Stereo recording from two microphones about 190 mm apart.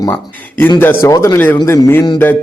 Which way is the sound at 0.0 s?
10° left (ahead or behind).